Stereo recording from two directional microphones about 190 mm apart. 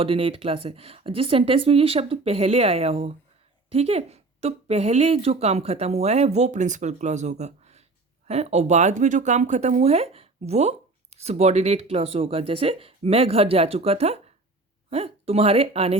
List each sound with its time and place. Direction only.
0.0 s speech: 30° right (ahead or behind)